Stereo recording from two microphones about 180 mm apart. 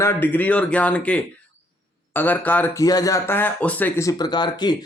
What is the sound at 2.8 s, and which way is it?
Speech, 20° left (ahead or behind).